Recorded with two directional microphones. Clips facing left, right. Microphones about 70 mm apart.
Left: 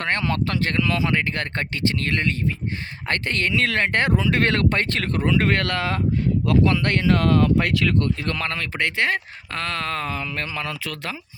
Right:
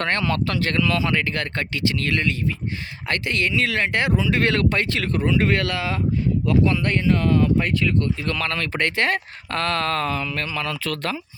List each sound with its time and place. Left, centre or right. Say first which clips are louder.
0.0 s speech: right 1 dB; left
6.4 s speech: left 1 dB; left
8.5 s speech: right 1 dB; centre; by 10.8 s left
10.8 s speech: right 5 dB; centre